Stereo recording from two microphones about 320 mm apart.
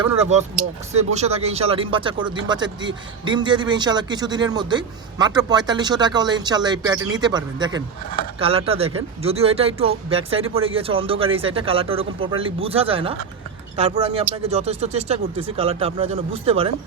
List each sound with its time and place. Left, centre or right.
0.0 s speech: right